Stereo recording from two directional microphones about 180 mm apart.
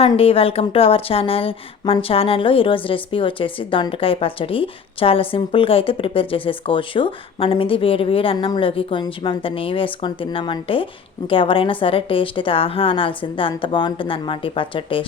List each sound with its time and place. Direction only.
0.0 s speech: 30° left (ahead or behind)